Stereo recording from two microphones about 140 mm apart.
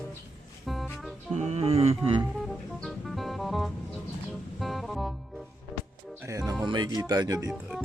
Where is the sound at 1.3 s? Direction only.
55° right (ahead or behind).